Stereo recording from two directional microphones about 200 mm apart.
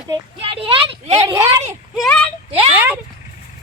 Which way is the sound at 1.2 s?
15° right (ahead or behind).